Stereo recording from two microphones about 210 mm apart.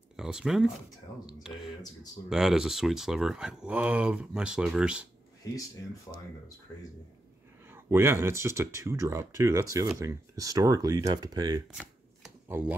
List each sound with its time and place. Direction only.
0.1 s speech: centre (ahead or behind)
7.7 s speech: 10° right (ahead or behind)
11.7 s shuffling cards: 5° right (ahead or behind)